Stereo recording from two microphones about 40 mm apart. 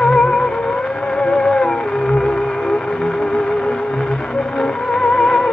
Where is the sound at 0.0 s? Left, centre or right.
Centre.